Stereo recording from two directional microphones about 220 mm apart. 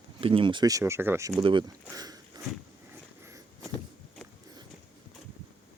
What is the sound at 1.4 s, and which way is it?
Speech, 20° right (ahead or behind).